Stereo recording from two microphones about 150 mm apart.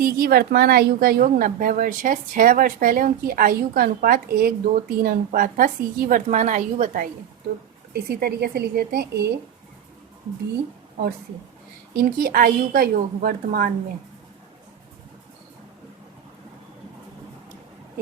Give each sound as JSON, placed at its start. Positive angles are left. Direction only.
{"t": 0.0, "sound": "a woman's voice", "side_deg": -85}
{"t": 8.1, "sound": "a woman's voice", "side_deg": -90}
{"t": 11.9, "sound": "a woman's voice", "side_deg": -75}